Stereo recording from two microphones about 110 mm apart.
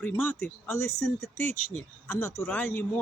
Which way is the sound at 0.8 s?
25° left (ahead or behind).